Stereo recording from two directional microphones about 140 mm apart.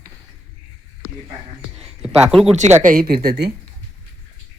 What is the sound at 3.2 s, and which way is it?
Speech, 30° right (ahead or behind).